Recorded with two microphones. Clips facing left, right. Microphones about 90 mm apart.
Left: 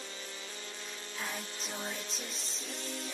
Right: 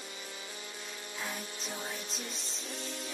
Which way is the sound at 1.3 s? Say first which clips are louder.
Even; 20° right (ahead or behind).